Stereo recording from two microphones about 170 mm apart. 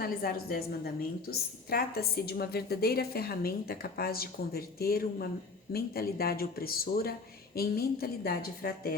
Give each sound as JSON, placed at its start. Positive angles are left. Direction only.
{"t": 0.0, "sound": "a woman's voice", "side_deg": 60}